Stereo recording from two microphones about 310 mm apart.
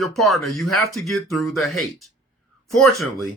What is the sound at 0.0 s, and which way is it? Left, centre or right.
A man's voice, centre.